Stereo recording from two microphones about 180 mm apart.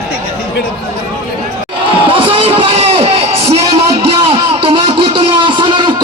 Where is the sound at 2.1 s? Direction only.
30° right (ahead or behind).